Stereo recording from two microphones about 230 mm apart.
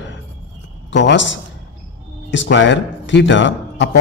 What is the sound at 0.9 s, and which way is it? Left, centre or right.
A man's voice, left.